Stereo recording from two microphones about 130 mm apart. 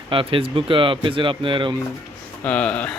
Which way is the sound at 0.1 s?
45° right (ahead or behind).